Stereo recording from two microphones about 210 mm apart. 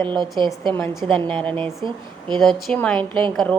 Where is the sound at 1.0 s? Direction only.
25° right (ahead or behind).